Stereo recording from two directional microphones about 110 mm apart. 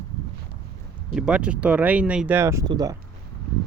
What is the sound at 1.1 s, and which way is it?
Speech, 5° right (ahead or behind).